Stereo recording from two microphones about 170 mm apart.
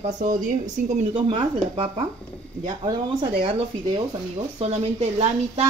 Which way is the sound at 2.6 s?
25° right (ahead or behind).